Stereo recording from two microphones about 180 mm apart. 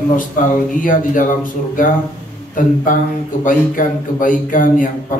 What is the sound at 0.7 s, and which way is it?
Speech, 45° left (ahead or behind).